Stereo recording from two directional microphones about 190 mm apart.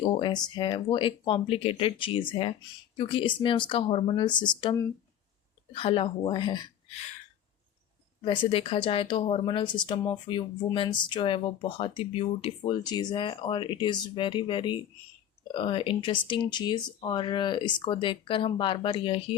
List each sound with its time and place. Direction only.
0.0 s speech: 25° left (ahead or behind)
8.2 s speech: 25° left (ahead or behind)